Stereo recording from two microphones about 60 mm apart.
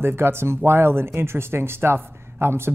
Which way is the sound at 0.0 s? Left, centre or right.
Right.